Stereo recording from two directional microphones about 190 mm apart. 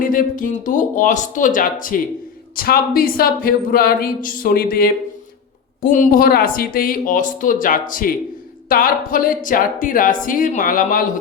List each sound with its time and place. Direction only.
0.0 s speech: 45° left (ahead or behind)